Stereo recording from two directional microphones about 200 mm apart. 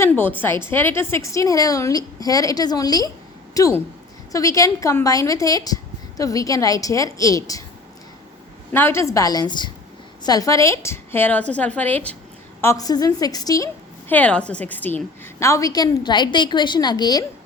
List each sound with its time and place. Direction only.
0.0 s a woman's voice: 10° left (ahead or behind)
8.7 s a woman's voice: 10° left (ahead or behind)
14.1 s a woman's voice: 5° left (ahead or behind)